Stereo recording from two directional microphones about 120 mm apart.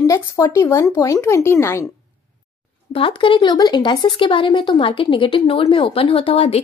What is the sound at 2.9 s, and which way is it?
Speech, 45° left (ahead or behind).